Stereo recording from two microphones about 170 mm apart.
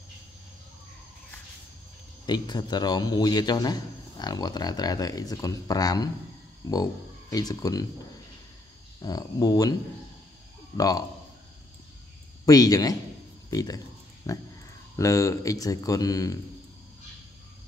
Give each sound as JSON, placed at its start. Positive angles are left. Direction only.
{"t": 2.2, "sound": "a man's voice", "side_deg": 25}
{"t": 9.0, "sound": "a man's voice", "side_deg": 20}
{"t": 10.8, "sound": "a man's voice", "side_deg": 20}
{"t": 12.4, "sound": "a man's voice", "side_deg": 20}